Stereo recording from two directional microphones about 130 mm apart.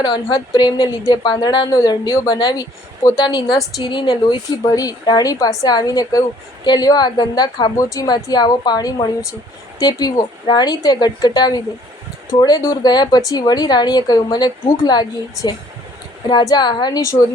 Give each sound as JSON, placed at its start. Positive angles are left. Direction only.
{"t": 0.0, "sound": "a woman's voice", "side_deg": 35}